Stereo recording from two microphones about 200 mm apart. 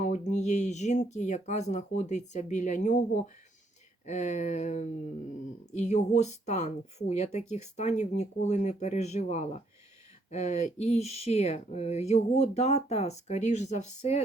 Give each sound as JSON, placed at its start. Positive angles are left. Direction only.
{"t": 0.0, "sound": "speech", "side_deg": 35}
{"t": 4.0, "sound": "speech", "side_deg": 35}